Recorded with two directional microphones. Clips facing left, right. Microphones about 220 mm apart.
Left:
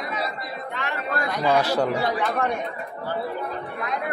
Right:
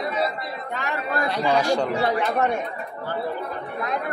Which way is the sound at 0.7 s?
40° right (ahead or behind).